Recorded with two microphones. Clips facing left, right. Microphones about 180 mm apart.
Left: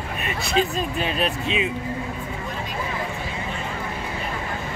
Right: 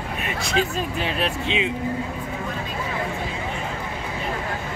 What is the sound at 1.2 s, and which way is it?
Speech, 80° right.